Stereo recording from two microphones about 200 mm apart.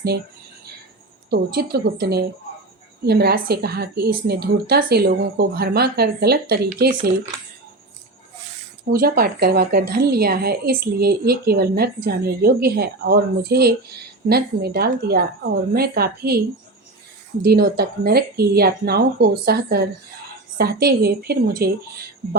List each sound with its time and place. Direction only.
1.3 s a woman's voice: 55° right (ahead or behind)
8.9 s a woman's voice: 50° right (ahead or behind)
17.4 s a woman's voice: 50° right (ahead or behind)